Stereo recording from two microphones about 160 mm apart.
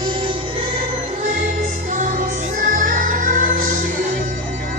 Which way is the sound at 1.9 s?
55° right (ahead or behind).